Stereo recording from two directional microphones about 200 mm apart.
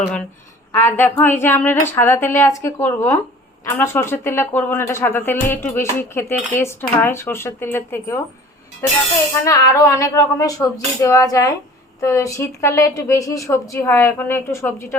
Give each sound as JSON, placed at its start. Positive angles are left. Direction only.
{"t": 0.7, "sound": "speech", "side_deg": 10}